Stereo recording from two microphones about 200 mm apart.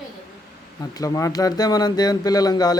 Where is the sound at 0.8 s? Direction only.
20° left (ahead or behind).